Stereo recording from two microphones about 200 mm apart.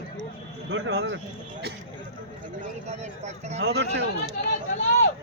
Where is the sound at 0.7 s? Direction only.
65° right (ahead or behind).